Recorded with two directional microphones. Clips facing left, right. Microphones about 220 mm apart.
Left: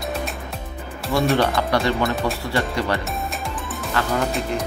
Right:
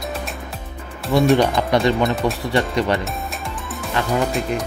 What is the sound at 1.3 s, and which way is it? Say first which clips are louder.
Speech: right 3 dB; 15° right (ahead or behind).